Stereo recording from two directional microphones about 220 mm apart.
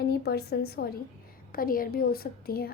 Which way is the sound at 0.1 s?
45° left (ahead or behind).